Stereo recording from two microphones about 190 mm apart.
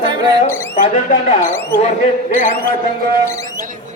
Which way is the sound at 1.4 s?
10° left (ahead or behind).